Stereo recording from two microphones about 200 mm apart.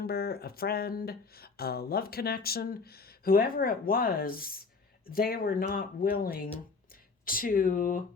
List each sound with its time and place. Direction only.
0.0 s speech: 50° left (ahead or behind)